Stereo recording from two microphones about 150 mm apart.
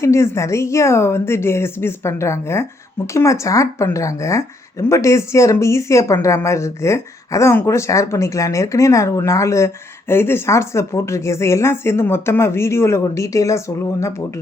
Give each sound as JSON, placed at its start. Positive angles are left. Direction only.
{"t": 0.0, "sound": "a woman's voice", "side_deg": 20}